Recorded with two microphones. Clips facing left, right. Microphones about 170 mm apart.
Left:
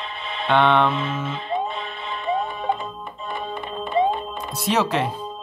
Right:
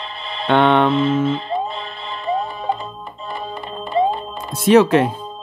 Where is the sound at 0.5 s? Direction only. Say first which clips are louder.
Right 4 dB; 50° right (ahead or behind).